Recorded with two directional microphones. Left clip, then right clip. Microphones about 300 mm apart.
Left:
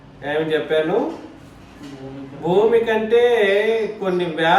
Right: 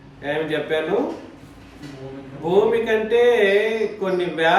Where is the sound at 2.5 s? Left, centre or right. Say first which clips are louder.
Left 2 dB; centre.